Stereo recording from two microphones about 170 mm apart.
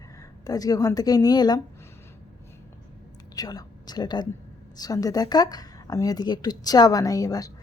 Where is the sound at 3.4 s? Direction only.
20° left (ahead or behind).